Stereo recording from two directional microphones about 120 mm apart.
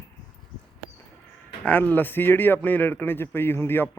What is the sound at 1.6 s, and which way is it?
A man's voice, 15° left (ahead or behind).